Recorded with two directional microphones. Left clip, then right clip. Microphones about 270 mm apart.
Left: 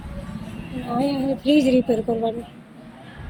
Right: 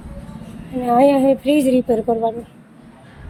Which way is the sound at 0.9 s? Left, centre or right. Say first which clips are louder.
Right 10 dB; centre.